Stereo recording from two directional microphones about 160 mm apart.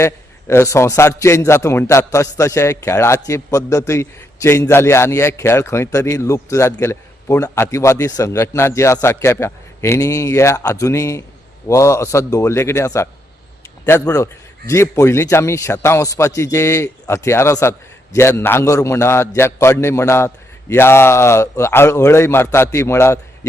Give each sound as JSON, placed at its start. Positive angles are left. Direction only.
{"t": 0.0, "sound": "a man's voice", "side_deg": 15}